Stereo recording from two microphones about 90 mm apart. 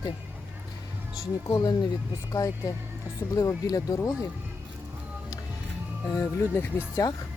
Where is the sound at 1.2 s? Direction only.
45° left (ahead or behind).